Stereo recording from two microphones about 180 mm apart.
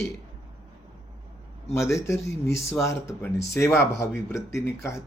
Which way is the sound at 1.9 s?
15° left (ahead or behind).